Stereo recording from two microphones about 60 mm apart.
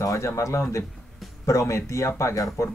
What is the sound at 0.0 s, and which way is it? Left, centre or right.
Speech, left.